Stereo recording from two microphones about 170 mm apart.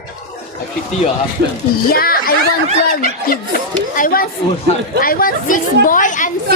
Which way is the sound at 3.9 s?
55° left (ahead or behind).